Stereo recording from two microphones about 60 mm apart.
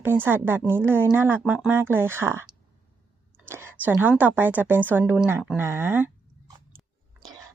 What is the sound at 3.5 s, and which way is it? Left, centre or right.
A woman's voice, right.